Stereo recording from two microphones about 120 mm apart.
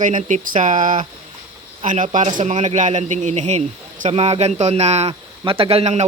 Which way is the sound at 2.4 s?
70° right (ahead or behind).